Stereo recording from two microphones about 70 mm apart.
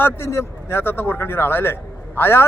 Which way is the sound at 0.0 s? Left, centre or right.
Left.